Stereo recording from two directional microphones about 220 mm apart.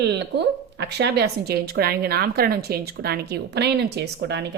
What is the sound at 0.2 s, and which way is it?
A woman's voice, 50° right (ahead or behind).